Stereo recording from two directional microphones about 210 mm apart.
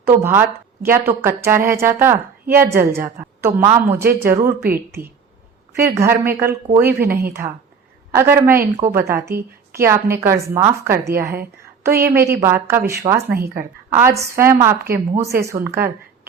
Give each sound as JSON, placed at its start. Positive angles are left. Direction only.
{"t": 0.1, "sound": "a woman's voice", "side_deg": -10}
{"t": 5.7, "sound": "a woman's voice", "side_deg": -10}
{"t": 7.1, "sound": "a woman's voice", "side_deg": -50}
{"t": 8.1, "sound": "a woman's voice", "side_deg": -10}
{"t": 13.3, "sound": "a woman's voice", "side_deg": -45}
{"t": 13.9, "sound": "a woman's voice", "side_deg": -15}